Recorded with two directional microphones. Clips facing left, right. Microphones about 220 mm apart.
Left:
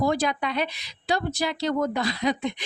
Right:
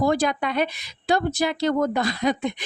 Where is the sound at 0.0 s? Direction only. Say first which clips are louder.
Right 3 dB; 50° right (ahead or behind).